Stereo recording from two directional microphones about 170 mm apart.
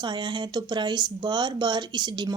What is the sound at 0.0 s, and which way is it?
Speech, 25° right (ahead or behind).